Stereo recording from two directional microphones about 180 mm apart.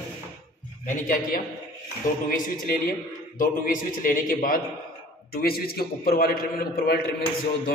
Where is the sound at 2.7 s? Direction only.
50° left (ahead or behind).